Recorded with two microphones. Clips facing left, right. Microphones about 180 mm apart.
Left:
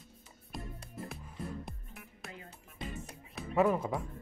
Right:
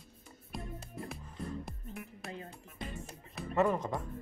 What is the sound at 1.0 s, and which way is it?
Music, centre (ahead or behind).